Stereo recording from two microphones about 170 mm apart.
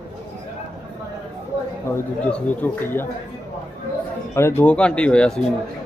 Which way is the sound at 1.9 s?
10° left (ahead or behind).